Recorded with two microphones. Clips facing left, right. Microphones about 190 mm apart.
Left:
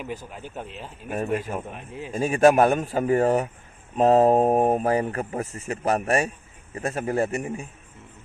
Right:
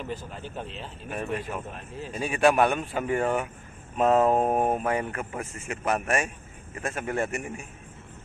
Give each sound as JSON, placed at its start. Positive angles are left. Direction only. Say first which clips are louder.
{"t": 0.0, "sound": "speech", "louder": "left 1 dB", "side_deg": 10}
{"t": 2.1, "sound": "speech", "louder": "left 5 dB", "side_deg": 45}